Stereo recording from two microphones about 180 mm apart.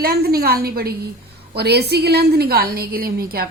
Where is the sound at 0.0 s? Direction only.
60° right (ahead or behind).